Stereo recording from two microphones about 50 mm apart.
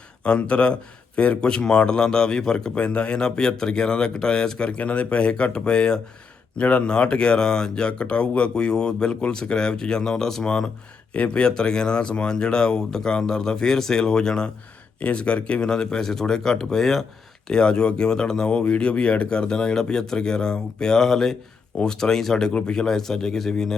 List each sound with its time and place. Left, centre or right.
0.3 s a man's voice: left
11.1 s speech: left; by 23.7 s centre